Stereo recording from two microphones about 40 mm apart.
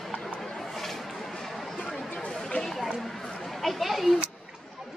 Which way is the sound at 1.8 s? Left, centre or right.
Centre.